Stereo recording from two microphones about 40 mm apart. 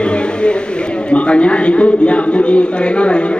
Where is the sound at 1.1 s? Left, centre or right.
Left.